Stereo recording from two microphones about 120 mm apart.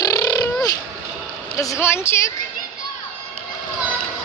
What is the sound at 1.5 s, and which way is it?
Speech, 25° left (ahead or behind).